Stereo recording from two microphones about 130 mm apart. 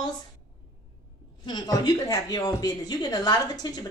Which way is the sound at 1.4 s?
35° left (ahead or behind).